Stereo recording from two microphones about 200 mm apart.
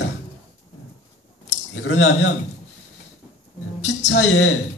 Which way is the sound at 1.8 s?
70° left (ahead or behind).